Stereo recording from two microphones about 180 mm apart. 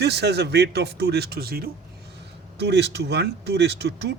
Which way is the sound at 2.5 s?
70° right (ahead or behind).